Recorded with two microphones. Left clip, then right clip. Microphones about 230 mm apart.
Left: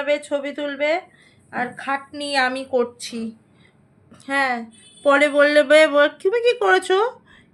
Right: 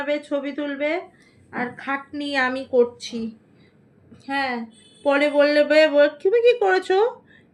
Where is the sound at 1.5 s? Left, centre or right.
Left.